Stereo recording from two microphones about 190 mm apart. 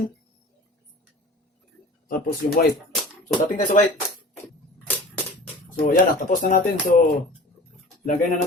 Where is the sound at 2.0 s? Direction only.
50° left (ahead or behind).